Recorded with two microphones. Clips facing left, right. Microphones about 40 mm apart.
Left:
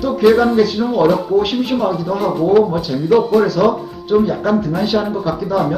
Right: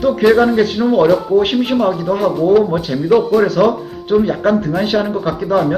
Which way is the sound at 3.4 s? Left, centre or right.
Right.